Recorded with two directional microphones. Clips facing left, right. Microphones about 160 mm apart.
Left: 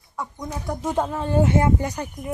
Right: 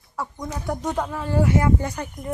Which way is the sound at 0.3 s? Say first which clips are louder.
Right 1 dB; 5° left (ahead or behind).